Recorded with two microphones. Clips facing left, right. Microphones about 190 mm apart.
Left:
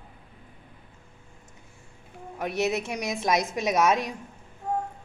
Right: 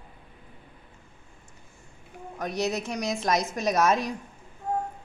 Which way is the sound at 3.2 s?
Centre (ahead or behind).